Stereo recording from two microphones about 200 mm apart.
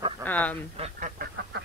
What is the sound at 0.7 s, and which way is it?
Duck, 30° right (ahead or behind).